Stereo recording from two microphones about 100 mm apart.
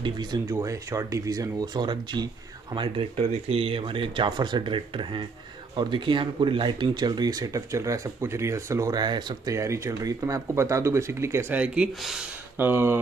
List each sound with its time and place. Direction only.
0.0 s speech: 45° right (ahead or behind)
0.5 s speech: 30° right (ahead or behind); by 3.1 s 50° right (ahead or behind)
3.2 s speech: 85° right; by 8.9 s 30° right (ahead or behind)
8.9 s speech: 45° right (ahead or behind)
9.5 s speech: 30° right (ahead or behind); by 12.3 s 5° right (ahead or behind)
12.5 s speech: 25° right (ahead or behind)